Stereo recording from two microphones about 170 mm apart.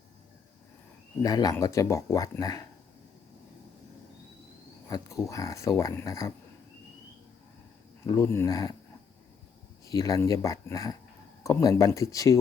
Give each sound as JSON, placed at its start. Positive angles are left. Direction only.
{"t": 1.2, "sound": "speech", "side_deg": 20}
{"t": 4.9, "sound": "speech", "side_deg": 20}
{"t": 8.0, "sound": "speech", "side_deg": 20}
{"t": 9.8, "sound": "speech", "side_deg": 20}